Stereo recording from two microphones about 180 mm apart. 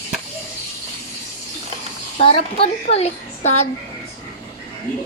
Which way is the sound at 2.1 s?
30° left (ahead or behind).